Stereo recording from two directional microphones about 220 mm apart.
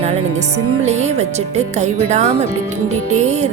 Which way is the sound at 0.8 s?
30° right (ahead or behind).